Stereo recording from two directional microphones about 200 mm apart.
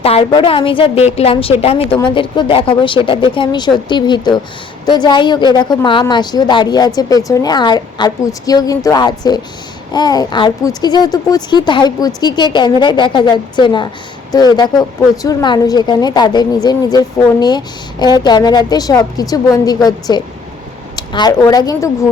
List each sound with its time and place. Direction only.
0.0 s a woman's voice: 30° left (ahead or behind)